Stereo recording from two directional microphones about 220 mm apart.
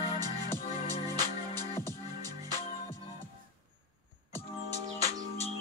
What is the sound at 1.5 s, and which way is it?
Music, 10° left (ahead or behind).